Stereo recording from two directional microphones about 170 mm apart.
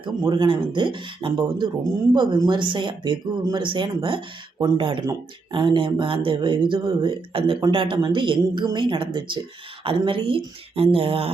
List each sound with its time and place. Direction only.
0.0 s speech: 25° right (ahead or behind)